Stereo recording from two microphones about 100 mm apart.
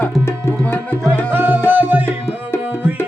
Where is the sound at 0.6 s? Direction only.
15° left (ahead or behind).